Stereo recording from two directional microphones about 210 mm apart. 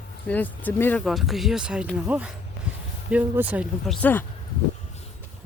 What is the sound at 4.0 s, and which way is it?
Speech, 10° left (ahead or behind).